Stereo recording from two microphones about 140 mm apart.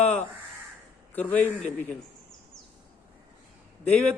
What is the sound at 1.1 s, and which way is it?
Speech, 10° left (ahead or behind).